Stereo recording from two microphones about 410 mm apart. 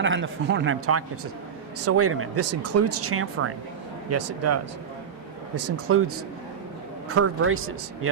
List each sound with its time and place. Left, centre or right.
0.0 s speech: right
7.1 s speech: right